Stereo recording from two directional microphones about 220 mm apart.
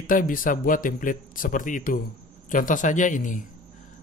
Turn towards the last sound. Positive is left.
turn(degrees=35)  # may be behind; listen again after turning